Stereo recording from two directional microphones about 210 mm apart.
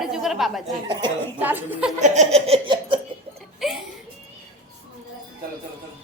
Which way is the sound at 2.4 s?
25° right (ahead or behind).